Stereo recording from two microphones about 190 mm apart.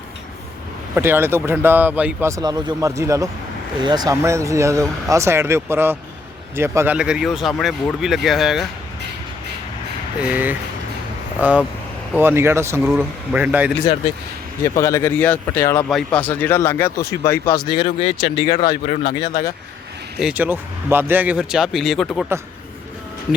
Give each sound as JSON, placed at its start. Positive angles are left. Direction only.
{"t": 0.9, "sound": "speech", "side_deg": -10}
{"t": 10.3, "sound": "speech", "side_deg": -10}
{"t": 12.8, "sound": "speech", "side_deg": 0}
{"t": 14.6, "sound": "speech", "side_deg": 15}
{"t": 20.1, "sound": "speech", "side_deg": -5}